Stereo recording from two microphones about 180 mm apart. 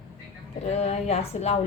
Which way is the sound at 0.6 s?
35° left (ahead or behind).